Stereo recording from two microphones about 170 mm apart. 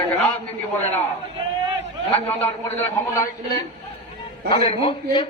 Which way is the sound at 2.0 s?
35° left (ahead or behind).